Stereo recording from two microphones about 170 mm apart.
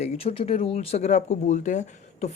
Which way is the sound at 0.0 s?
35° left (ahead or behind).